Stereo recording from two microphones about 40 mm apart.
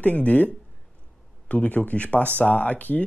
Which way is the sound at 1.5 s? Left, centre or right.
Left.